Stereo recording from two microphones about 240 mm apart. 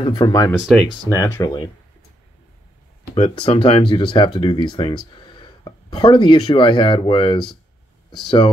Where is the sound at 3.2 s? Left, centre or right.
Left.